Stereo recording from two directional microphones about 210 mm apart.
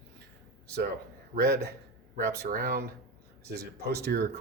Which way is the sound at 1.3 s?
50° right (ahead or behind).